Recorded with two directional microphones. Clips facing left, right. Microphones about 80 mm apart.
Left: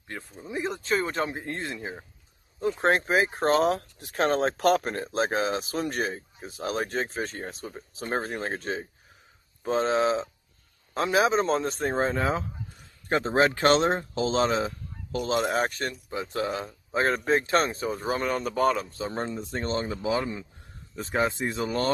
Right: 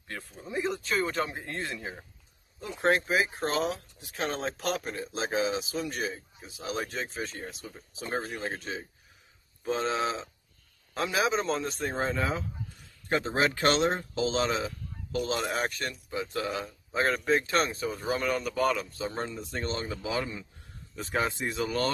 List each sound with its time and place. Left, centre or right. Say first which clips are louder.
0.6 s speech: left 2 dB; left
2.6 s speech: left 3 dB; left